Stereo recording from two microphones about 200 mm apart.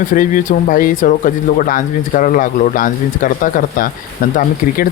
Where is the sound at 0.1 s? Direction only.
40° left (ahead or behind).